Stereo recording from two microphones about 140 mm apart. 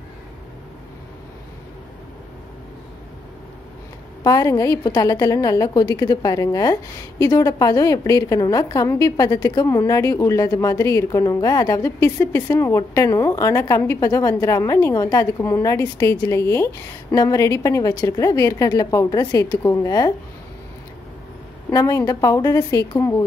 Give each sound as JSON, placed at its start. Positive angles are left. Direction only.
{"t": 4.2, "sound": "a woman's voice", "side_deg": 25}
{"t": 21.6, "sound": "a woman's voice", "side_deg": 20}